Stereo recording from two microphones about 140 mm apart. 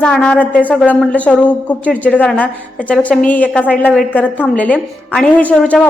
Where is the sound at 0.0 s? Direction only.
10° left (ahead or behind).